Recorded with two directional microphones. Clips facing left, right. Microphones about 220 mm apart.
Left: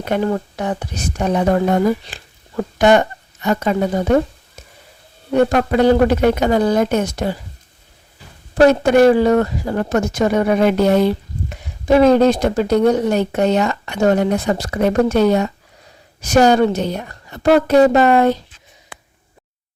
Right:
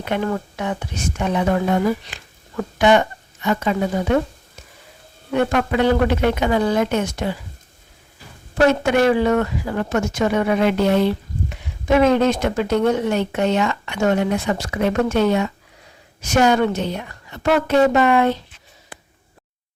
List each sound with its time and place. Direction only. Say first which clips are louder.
0.3 s speech: left 3 dB; 35° left (ahead or behind)
5.3 s speech: left 4 dB; 40° left (ahead or behind)
8.5 s speech: left 5 dB; 40° left (ahead or behind)